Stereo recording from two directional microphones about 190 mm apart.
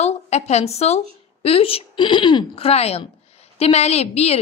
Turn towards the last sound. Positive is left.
turn(degrees=35)  # may be behind; listen again after turning